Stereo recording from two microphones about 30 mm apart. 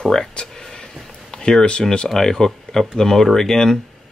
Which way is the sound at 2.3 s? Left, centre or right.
Centre.